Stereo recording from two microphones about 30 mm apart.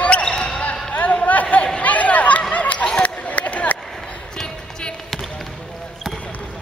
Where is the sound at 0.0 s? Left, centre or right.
Left.